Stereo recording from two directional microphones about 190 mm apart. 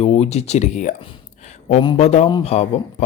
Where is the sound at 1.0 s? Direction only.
35° left (ahead or behind).